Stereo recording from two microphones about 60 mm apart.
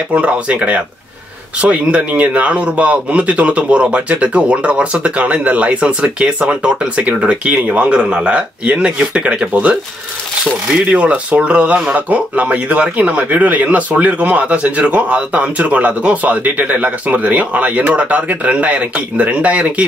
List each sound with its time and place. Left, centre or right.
0.1 s speech: right
10.9 s speech: right